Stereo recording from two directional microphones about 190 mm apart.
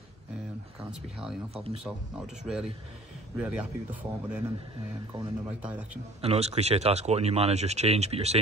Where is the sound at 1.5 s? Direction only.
30° right (ahead or behind).